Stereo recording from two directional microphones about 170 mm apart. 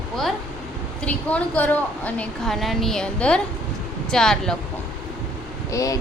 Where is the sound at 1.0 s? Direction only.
10° left (ahead or behind).